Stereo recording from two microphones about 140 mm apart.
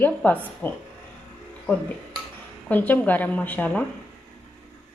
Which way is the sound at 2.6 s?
10° left (ahead or behind).